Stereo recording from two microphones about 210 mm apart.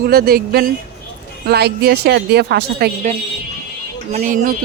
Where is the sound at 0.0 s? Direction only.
45° right (ahead or behind).